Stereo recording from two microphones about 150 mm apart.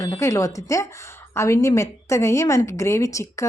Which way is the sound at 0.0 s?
20° left (ahead or behind).